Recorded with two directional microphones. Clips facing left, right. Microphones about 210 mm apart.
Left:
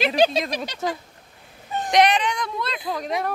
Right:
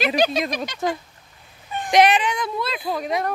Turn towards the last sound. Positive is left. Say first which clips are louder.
# right 2 dB
turn(degrees=-5)  # may be behind; listen again after turning